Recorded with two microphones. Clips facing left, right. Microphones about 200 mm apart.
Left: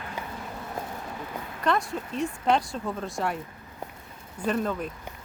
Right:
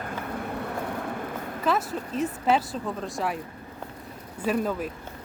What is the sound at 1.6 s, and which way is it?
Speech, 5° right (ahead or behind).